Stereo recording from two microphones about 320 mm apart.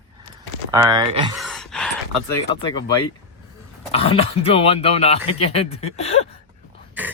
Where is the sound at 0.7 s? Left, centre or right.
Centre.